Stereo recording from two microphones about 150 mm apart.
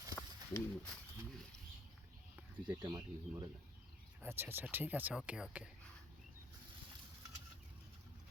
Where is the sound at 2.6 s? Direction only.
30° right (ahead or behind).